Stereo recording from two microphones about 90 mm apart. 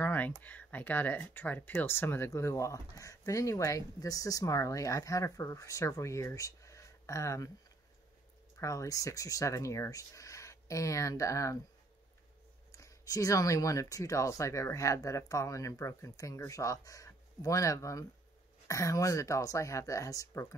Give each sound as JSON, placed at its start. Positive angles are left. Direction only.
{"t": 0.0, "sound": "a sound", "side_deg": 20}
{"t": 0.4, "sound": "speech", "side_deg": 20}
{"t": 8.5, "sound": "speech", "side_deg": 35}
{"t": 12.7, "sound": "speech", "side_deg": 40}